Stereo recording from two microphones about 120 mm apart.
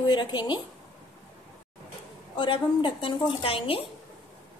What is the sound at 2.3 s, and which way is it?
A woman's voice, 40° left (ahead or behind).